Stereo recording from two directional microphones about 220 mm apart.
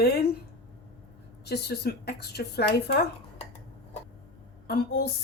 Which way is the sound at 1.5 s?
45° left (ahead or behind).